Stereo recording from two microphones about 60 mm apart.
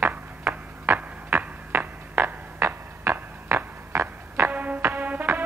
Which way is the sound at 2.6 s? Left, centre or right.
Right.